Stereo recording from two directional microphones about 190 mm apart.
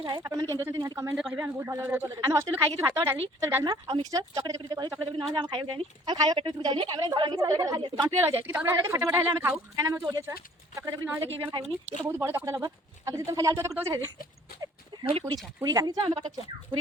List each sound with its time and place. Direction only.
0.0 s speech: 20° right (ahead or behind)
1.1 s speech: 5° right (ahead or behind)
1.4 s speech: 15° right (ahead or behind)
8.4 s speech: 10° right (ahead or behind)
11.5 s speech: 30° right (ahead or behind)
12.0 s speech: 15° right (ahead or behind)
15.2 s speech: 15° right (ahead or behind)